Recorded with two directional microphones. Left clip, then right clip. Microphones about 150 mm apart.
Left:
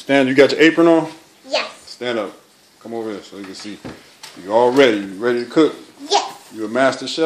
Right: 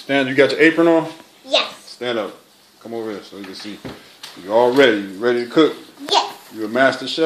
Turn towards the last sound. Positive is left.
turn(degrees=5)  # may be behind; listen again after turning